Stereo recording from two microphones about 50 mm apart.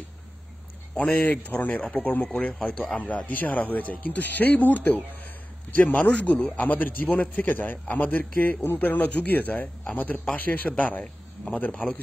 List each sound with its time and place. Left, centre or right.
0.9 s speech: left